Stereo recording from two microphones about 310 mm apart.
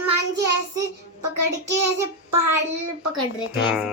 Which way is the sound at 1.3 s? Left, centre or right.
Right.